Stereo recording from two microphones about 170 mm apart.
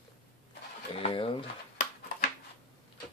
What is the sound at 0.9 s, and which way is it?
Speech, 35° left (ahead or behind).